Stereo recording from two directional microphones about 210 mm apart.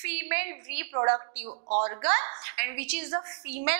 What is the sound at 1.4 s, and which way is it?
Speech, 35° right (ahead or behind).